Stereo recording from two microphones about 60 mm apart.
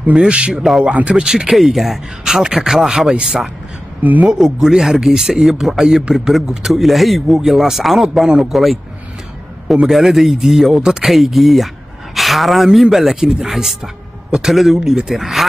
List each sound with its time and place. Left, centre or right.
0.1 s speech: centre
1.5 s a man's voice: centre
9.9 s a man's voice: centre